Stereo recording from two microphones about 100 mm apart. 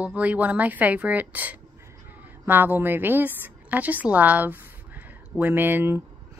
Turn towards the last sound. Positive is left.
turn(degrees=-20)  # may be behind; listen again after turning